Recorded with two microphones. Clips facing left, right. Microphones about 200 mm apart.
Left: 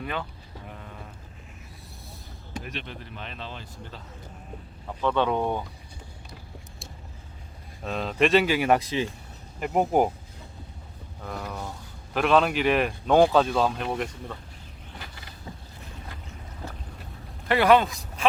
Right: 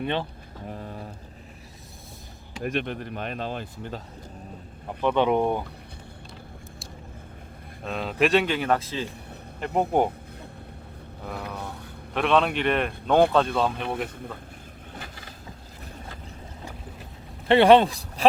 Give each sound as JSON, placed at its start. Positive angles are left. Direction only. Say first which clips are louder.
{"t": 0.0, "sound": "speech", "louder": "right 5 dB", "side_deg": -30}
{"t": 0.7, "sound": "a sound", "louder": "right 8 dB", "side_deg": -35}
{"t": 2.6, "sound": "speech", "louder": "right 9 dB", "side_deg": -55}
{"t": 5.0, "sound": "speech", "louder": "right 3 dB", "side_deg": -15}
{"t": 7.9, "sound": "speech", "louder": "even", "side_deg": 0}
{"t": 9.6, "sound": "speech", "louder": "left 1 dB", "side_deg": 5}
{"t": 11.3, "sound": "speech", "louder": "even", "side_deg": -5}
{"t": 17.5, "sound": "speech", "louder": "right 4 dB", "side_deg": -25}